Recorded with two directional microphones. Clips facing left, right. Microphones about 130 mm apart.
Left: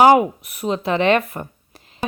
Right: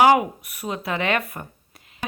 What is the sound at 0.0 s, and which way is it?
Speech, 30° left (ahead or behind).